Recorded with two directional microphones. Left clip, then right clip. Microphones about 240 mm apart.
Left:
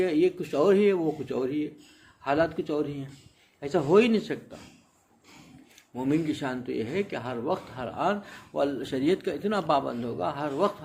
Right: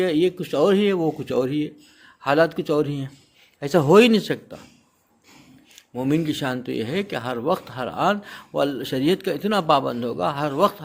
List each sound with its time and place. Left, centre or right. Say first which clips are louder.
0.0 s speech: right 4 dB; right
5.7 s speech: right 5 dB; right